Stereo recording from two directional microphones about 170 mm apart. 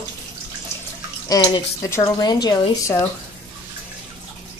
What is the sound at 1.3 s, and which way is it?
Speech, 20° left (ahead or behind).